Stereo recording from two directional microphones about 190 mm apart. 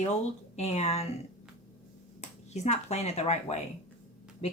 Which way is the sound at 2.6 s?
35° left (ahead or behind).